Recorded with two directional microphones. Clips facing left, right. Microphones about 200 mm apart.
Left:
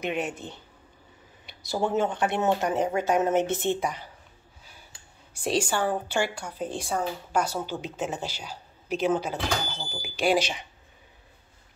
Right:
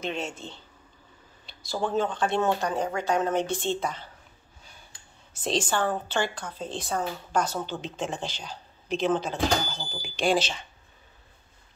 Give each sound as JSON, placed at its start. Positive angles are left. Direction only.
{"t": 0.0, "sound": "a woman's voice", "side_deg": 15}
{"t": 1.6, "sound": "speech", "side_deg": 20}
{"t": 5.3, "sound": "a woman's voice", "side_deg": 10}